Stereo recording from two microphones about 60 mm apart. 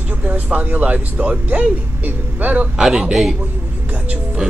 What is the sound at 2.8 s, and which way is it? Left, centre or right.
Speech, centre.